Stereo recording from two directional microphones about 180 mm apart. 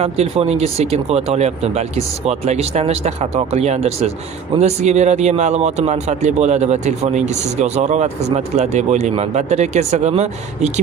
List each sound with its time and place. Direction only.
0.0 s speech: 35° right (ahead or behind)